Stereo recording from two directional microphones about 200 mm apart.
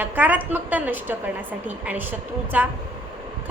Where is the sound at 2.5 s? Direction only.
10° right (ahead or behind).